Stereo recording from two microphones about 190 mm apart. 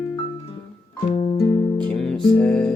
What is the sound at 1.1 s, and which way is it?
Music, 30° left (ahead or behind).